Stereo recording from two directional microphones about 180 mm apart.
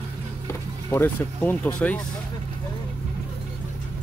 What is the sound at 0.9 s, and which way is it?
Speech, 10° left (ahead or behind).